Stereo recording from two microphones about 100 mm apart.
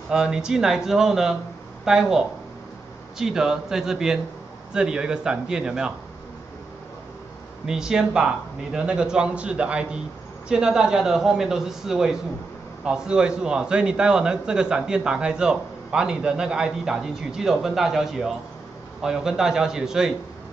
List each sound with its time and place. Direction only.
0.1 s a man's voice: 5° right (ahead or behind)
7.6 s a man's voice: 5° right (ahead or behind)